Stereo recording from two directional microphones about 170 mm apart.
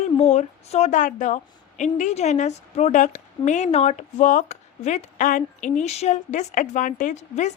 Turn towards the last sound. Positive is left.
turn(degrees=45)  # may be behind; listen again after turning